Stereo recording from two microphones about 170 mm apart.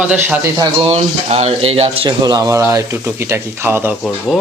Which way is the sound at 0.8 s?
40° right (ahead or behind).